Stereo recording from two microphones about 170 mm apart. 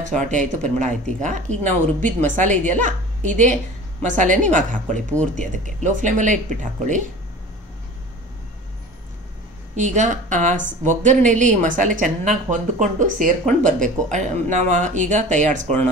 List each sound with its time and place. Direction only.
0.0 s speech: 45° right (ahead or behind)
9.8 s speech: 45° right (ahead or behind)